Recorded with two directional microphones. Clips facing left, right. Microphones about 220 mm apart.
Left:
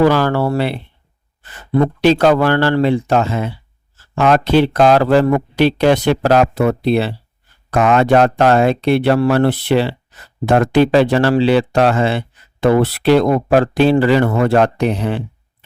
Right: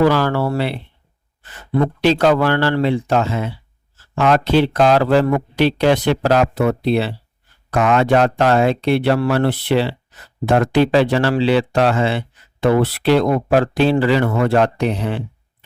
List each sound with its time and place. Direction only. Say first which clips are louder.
0.0 s a man's voice: left 2 dB; 50° left (ahead or behind)
2.0 s a man's voice: left 2 dB; 45° left (ahead or behind)